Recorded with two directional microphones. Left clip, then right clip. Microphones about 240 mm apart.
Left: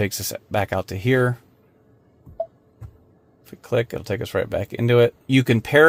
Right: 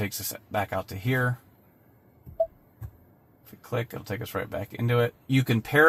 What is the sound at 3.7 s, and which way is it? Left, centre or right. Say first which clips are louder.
Speech: left 9 dB; left.